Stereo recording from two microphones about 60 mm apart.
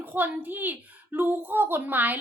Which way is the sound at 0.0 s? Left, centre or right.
Right.